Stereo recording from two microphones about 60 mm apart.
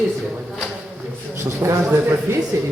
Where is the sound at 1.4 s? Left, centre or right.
Right.